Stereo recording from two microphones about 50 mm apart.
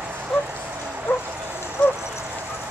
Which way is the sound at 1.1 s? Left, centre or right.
Left.